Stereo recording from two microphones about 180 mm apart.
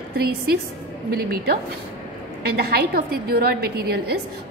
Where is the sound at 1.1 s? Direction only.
55° right (ahead or behind).